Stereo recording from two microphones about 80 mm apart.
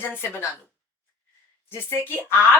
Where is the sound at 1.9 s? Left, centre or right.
Left.